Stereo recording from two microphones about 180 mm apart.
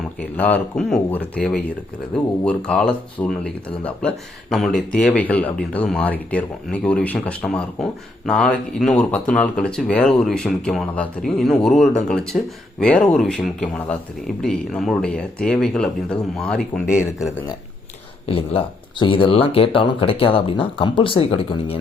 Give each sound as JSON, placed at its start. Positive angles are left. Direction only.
{"t": 0.2, "sound": "speech", "side_deg": 10}
{"t": 18.3, "sound": "speech", "side_deg": 30}